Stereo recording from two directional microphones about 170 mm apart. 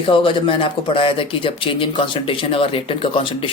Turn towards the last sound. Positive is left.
turn(degrees=30)  # may be behind; listen again after turning